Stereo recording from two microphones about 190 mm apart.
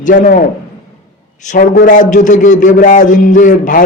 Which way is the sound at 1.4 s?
45° left (ahead or behind).